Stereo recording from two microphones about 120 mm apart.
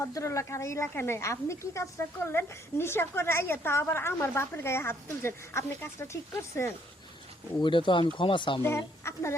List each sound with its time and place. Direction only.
0.0 s a woman's voice: 25° left (ahead or behind)
7.6 s speech: 45° left (ahead or behind)
8.6 s a woman's voice: 20° left (ahead or behind)